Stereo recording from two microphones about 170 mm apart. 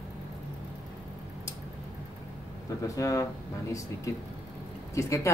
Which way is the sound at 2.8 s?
20° left (ahead or behind).